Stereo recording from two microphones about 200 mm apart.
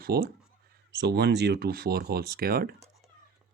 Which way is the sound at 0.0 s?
50° right (ahead or behind).